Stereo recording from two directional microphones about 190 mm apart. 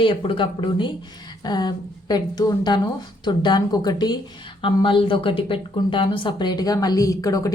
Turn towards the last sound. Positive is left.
turn(degrees=20)  # may be behind; listen again after turning